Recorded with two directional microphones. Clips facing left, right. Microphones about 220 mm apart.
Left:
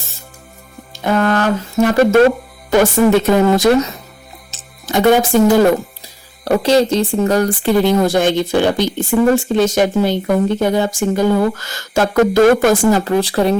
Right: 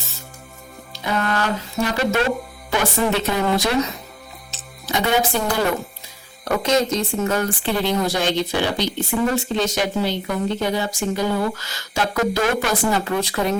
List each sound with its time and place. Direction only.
0.9 s speech: 50° left (ahead or behind)
4.5 s music: 50° left (ahead or behind)
6.4 s speech: 35° left (ahead or behind)